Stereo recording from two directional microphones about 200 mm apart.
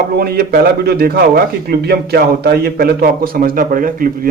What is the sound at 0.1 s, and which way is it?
Speech, 50° right (ahead or behind).